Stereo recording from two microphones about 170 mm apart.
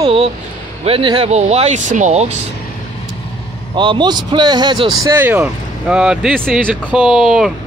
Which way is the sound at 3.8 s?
25° right (ahead or behind).